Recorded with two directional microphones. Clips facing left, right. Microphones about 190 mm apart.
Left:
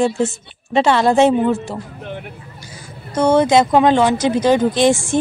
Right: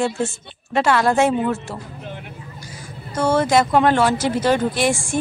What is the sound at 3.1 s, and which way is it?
A woman's voice, 20° left (ahead or behind).